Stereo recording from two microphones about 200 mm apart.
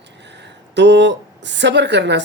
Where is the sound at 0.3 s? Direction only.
60° right (ahead or behind).